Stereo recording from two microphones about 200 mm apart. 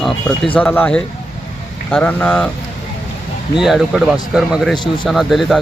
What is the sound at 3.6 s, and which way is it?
Speech, centre (ahead or behind).